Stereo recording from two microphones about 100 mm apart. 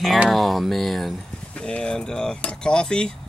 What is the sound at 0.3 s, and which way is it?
Speech, centre (ahead or behind).